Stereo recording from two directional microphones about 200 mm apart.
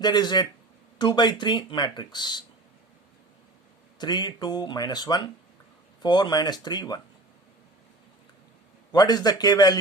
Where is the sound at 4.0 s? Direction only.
20° left (ahead or behind).